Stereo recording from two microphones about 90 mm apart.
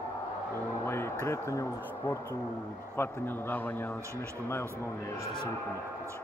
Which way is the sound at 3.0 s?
20° left (ahead or behind).